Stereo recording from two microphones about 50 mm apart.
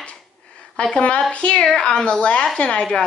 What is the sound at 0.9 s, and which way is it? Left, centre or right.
A woman's voice, left.